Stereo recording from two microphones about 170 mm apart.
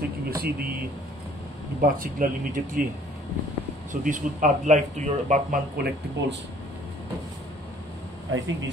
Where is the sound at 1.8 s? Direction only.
55° right (ahead or behind).